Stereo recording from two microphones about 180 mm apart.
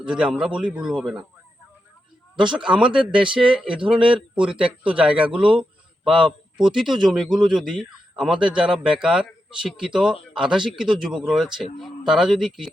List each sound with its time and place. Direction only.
0.0 s a man's voice: 5° right (ahead or behind)
2.4 s a man's voice: 25° right (ahead or behind)
2.6 s a man's voice: 5° right (ahead or behind)